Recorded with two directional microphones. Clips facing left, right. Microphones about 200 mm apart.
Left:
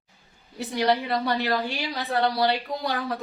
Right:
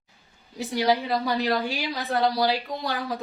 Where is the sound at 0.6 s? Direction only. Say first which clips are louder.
Even; centre (ahead or behind).